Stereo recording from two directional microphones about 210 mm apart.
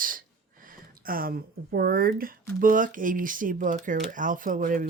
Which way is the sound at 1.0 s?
45° right (ahead or behind).